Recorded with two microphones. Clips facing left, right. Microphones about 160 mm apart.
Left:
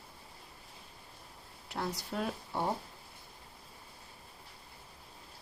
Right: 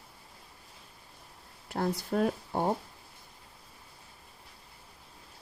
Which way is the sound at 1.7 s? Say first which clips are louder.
Right 7 dB; 50° right (ahead or behind).